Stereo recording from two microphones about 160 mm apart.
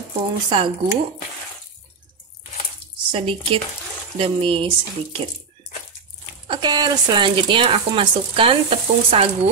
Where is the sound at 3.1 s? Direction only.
35° right (ahead or behind).